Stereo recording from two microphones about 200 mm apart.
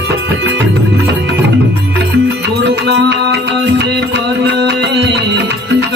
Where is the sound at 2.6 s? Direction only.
60° right (ahead or behind).